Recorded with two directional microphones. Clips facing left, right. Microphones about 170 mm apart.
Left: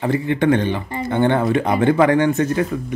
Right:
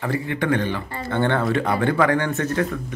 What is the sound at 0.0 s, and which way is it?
A woman's voice, 20° left (ahead or behind).